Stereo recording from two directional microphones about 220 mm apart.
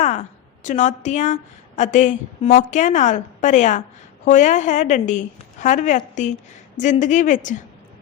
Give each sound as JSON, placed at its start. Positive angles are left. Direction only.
{"t": 0.6, "sound": "a woman's voice", "side_deg": 35}